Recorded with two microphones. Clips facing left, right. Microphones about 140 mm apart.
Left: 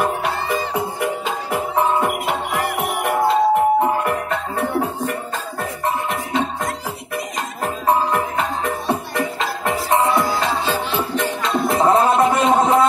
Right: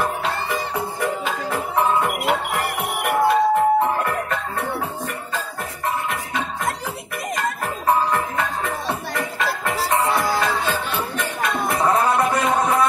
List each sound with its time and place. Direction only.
0.0 s music: 20° left (ahead or behind)
7.6 s music: 20° left (ahead or behind)